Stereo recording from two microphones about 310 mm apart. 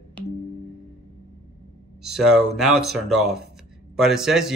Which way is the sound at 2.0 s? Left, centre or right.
Centre.